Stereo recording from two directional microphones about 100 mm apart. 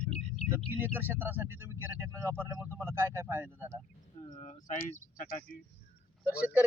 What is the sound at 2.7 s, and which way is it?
Speech, 20° right (ahead or behind).